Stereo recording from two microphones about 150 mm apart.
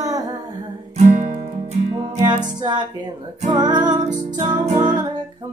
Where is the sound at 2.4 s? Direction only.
30° right (ahead or behind).